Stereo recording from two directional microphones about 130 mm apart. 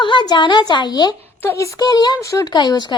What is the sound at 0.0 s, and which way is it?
Speech, 35° left (ahead or behind).